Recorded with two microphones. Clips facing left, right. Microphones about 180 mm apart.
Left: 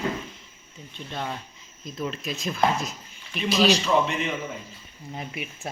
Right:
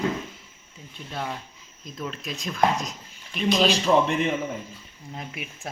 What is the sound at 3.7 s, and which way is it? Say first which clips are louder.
Speech: right 1 dB; 55° right (ahead or behind).